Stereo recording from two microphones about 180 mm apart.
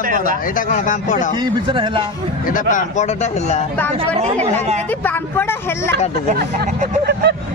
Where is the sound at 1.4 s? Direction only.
30° right (ahead or behind).